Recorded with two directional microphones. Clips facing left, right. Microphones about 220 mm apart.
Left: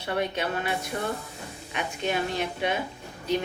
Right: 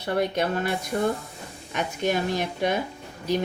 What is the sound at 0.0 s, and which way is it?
Speech, 40° right (ahead or behind).